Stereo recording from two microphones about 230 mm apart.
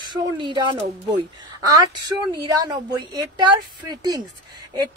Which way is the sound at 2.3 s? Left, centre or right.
Centre.